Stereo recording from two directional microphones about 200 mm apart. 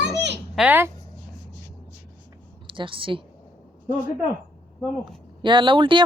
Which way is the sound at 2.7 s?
25° right (ahead or behind).